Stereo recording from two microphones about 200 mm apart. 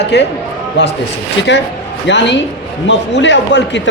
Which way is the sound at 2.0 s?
60° left (ahead or behind).